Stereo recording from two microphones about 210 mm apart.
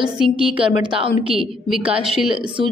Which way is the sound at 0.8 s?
25° right (ahead or behind).